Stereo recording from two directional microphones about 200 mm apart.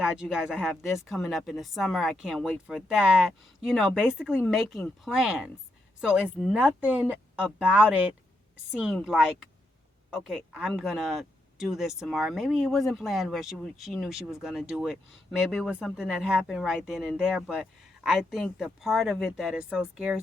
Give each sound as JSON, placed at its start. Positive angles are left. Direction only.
{"t": 0.0, "sound": "a woman's voice", "side_deg": -5}